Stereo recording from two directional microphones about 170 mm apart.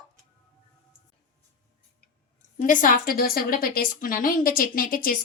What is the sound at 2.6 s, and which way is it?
A woman's voice, 50° left (ahead or behind).